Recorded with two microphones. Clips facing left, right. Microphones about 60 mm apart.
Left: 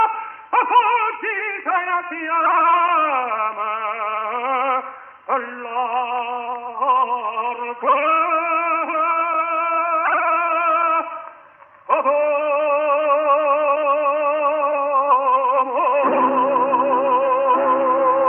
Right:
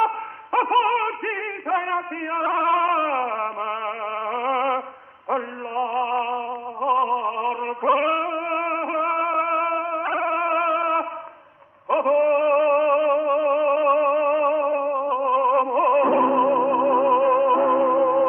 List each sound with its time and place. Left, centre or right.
0.0 s music: left
5.3 s a sound: left
6.0 s music: centre
7.0 s gargling: left
8.3 s music: left
8.5 s music: left; by 9.7 s centre
9.7 s music: left
12.3 s music: centre
13.2 s music: left
13.8 s music: left
15.3 s music: left